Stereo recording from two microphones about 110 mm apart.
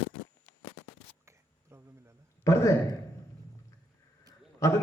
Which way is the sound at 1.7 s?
25° right (ahead or behind).